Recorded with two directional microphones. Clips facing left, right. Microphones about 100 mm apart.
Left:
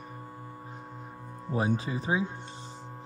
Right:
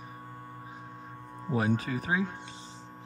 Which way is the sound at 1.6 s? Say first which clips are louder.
Even; 25° left (ahead or behind).